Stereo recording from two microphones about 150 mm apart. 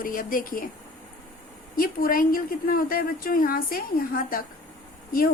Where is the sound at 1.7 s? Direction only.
75° left (ahead or behind).